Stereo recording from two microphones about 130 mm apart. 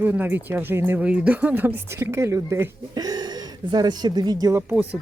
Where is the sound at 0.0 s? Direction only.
15° right (ahead or behind); by 4.5 s 30° right (ahead or behind).